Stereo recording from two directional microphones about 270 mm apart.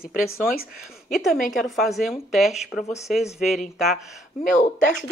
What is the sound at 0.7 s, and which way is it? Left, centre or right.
A woman's voice, centre.